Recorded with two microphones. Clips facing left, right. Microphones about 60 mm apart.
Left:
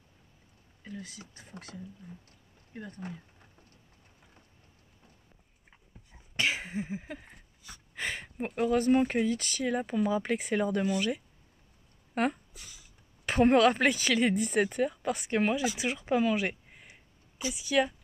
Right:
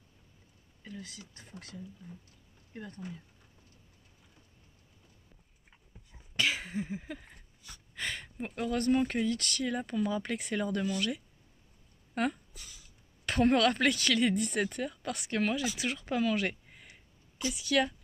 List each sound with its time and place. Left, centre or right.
0.9 s speech: left
3.0 s speech: left
6.1 s cough: centre
7.6 s speech: centre